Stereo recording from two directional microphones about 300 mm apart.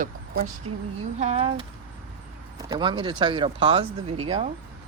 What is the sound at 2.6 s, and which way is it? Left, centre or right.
Speech, centre.